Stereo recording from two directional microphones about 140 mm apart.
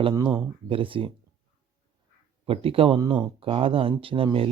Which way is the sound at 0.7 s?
40° right (ahead or behind).